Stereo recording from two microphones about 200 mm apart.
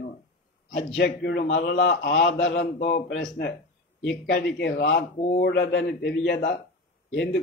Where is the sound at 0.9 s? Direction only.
60° left (ahead or behind).